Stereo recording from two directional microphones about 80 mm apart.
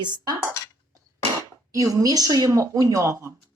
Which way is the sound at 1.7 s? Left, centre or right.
Right.